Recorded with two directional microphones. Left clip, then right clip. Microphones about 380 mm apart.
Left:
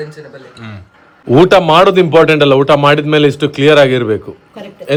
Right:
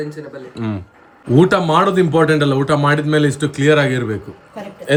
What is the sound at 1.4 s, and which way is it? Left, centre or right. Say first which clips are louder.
Speech: left 7 dB; left.